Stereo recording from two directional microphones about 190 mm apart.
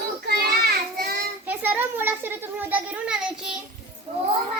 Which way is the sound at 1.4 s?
10° right (ahead or behind).